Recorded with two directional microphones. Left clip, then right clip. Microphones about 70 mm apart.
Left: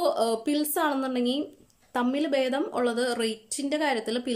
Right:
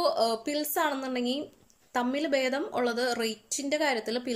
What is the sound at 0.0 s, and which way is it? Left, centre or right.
A woman's voice, left.